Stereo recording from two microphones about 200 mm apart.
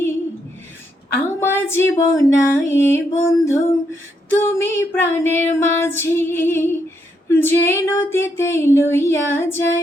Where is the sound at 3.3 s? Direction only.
15° left (ahead or behind).